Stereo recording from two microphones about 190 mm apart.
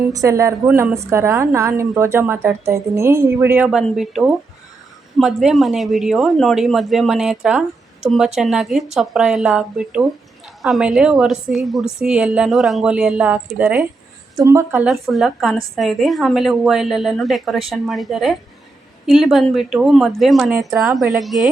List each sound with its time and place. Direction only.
0.1 s a woman's voice: 15° right (ahead or behind); by 20.6 s centre (ahead or behind)
20.6 s a woman's voice: 20° right (ahead or behind)
21.2 s a woman's voice: centre (ahead or behind)